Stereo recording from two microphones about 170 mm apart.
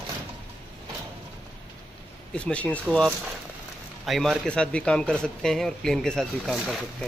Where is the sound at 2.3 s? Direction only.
5° left (ahead or behind).